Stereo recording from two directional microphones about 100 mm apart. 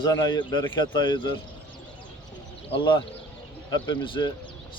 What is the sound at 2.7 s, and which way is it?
Speech, 50° left (ahead or behind).